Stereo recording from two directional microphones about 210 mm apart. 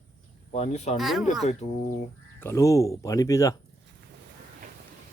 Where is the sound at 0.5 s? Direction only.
30° left (ahead or behind).